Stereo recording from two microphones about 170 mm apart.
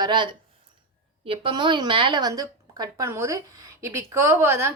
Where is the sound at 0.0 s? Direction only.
25° right (ahead or behind).